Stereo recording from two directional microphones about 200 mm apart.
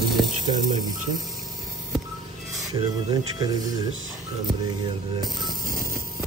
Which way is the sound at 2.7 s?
20° right (ahead or behind).